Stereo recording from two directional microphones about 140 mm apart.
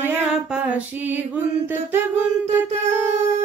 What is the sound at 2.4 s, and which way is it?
Humming, 55° right (ahead or behind).